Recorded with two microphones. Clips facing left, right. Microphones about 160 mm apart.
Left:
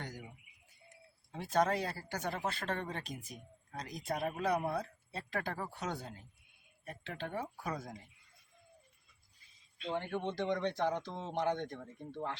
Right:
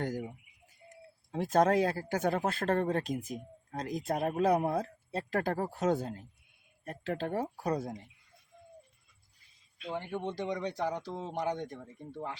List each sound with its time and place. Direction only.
0.0 s speech: 45° right (ahead or behind)
1.3 s speech: 45° right (ahead or behind)
9.7 s speech: 5° right (ahead or behind)